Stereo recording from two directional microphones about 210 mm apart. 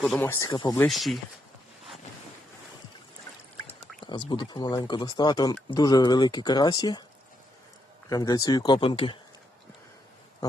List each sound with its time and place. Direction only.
0.0 s speech: 5° left (ahead or behind); by 0.8 s 20° left (ahead or behind)
0.8 s speech: centre (ahead or behind)
4.0 s speech: 20° left (ahead or behind)
8.1 s speech: 15° left (ahead or behind)